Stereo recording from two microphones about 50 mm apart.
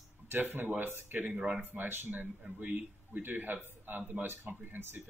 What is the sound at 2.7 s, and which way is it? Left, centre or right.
A man's voice, right.